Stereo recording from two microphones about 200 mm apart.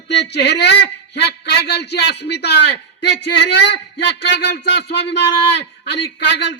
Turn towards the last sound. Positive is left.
turn(degrees=60)  # may be behind; listen again after turning